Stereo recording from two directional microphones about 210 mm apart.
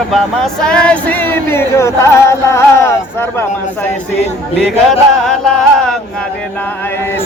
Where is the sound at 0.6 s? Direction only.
5° left (ahead or behind).